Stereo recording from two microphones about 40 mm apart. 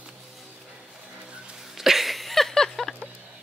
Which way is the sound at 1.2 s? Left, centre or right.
Right.